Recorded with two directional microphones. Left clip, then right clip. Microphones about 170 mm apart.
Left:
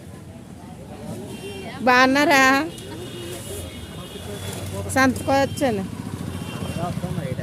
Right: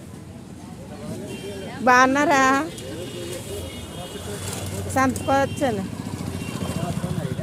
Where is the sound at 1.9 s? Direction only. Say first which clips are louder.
Even; 10° left (ahead or behind).